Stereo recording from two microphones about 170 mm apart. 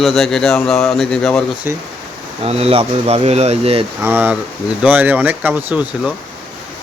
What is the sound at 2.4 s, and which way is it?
Speech, 35° right (ahead or behind).